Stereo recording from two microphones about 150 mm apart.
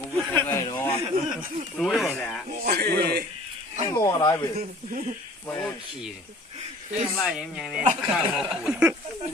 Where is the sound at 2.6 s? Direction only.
90° right.